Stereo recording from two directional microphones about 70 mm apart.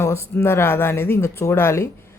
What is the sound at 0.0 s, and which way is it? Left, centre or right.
Speech, left.